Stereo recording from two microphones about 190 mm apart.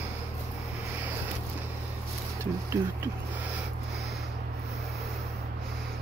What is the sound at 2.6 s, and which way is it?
Speech, 15° right (ahead or behind).